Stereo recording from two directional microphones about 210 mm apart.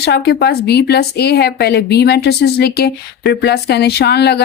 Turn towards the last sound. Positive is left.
turn(degrees=50)  # may be behind; listen again after turning